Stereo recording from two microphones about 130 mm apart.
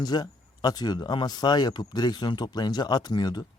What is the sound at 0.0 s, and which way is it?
Speech, 30° left (ahead or behind).